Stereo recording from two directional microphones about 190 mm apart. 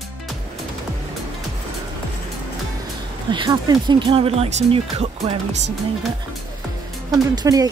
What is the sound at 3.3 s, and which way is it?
Speech, 25° right (ahead or behind).